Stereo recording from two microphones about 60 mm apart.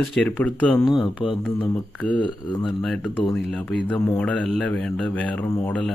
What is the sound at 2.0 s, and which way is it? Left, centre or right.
Speech, left.